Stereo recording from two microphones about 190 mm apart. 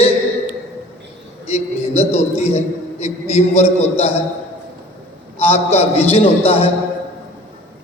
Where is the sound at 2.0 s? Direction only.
35° left (ahead or behind).